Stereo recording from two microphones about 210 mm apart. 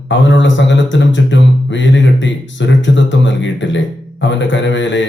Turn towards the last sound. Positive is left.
turn(degrees=60)  # may be behind; listen again after turning